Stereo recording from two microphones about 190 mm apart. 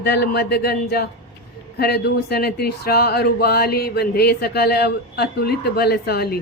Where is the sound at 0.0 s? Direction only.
60° left (ahead or behind).